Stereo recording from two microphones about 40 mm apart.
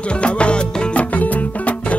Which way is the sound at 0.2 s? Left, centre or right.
Left.